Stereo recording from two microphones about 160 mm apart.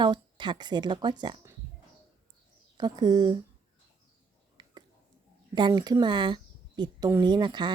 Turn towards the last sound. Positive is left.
turn(degrees=-30)  # may be behind; listen again after turning